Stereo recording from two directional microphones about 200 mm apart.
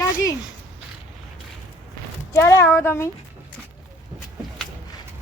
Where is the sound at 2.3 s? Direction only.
15° left (ahead or behind).